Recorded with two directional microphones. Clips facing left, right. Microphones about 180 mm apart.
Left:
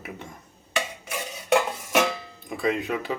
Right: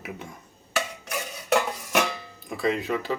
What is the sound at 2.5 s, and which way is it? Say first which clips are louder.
Speech: even; centre (ahead or behind).